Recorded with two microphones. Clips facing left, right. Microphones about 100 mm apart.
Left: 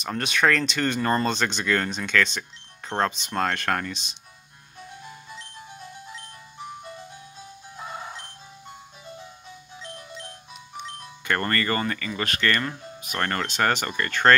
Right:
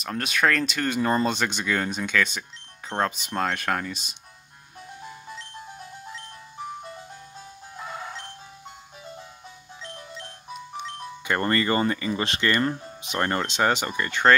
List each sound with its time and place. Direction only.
0.0 s speech: centre (ahead or behind)
7.7 s music: 5° left (ahead or behind)
9.8 s music: 5° left (ahead or behind)
11.2 s speech: 15° right (ahead or behind)